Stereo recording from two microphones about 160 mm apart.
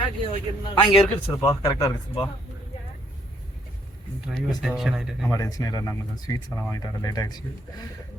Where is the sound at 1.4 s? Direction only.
20° left (ahead or behind).